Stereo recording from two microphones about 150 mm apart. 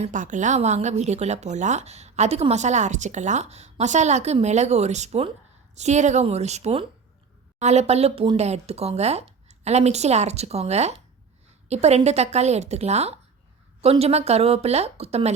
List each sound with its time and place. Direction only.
0.0 s a woman's voice: 60° right (ahead or behind)